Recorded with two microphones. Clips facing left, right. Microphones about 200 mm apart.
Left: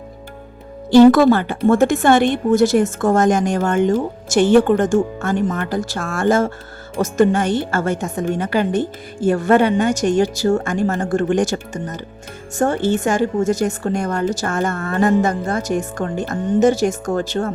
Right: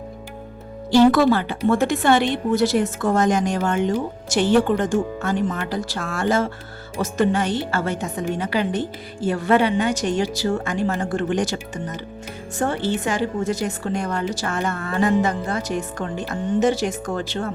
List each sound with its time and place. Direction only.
0.9 s a woman's voice: 50° left (ahead or behind)